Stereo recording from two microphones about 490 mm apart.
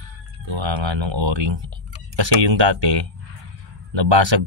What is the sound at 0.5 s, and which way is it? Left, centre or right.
Speech, right.